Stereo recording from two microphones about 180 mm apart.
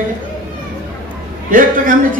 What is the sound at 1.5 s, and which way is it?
Speech, 50° right (ahead or behind).